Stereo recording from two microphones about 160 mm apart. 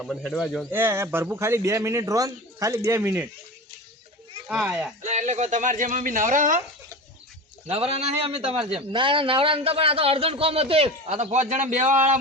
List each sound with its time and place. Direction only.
0.0 s speech: 5° left (ahead or behind)
0.7 s a man's voice: 15° right (ahead or behind)
4.4 s a man's voice: 10° right (ahead or behind)
5.0 s speech: 45° right (ahead or behind)
7.7 s a man's voice: 40° right (ahead or behind)